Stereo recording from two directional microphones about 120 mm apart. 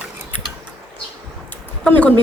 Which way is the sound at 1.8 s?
10° left (ahead or behind).